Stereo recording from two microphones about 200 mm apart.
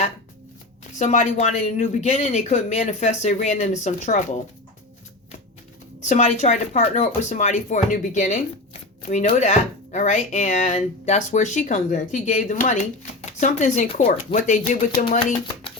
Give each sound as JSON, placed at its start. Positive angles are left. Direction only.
{"t": 0.9, "sound": "speech", "side_deg": 35}
{"t": 6.1, "sound": "speech", "side_deg": 30}